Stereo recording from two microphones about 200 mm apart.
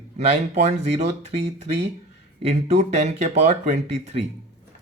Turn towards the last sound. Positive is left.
turn(degrees=-30)  # may be behind; listen again after turning